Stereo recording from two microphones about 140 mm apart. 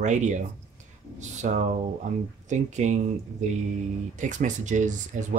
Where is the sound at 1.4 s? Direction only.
60° right (ahead or behind).